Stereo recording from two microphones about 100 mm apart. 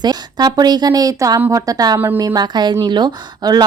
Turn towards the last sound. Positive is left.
turn(degrees=-45)  # may be behind; listen again after turning